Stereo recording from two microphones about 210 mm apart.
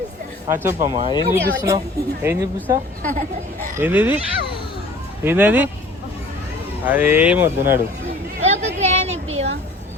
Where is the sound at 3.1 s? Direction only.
40° right (ahead or behind).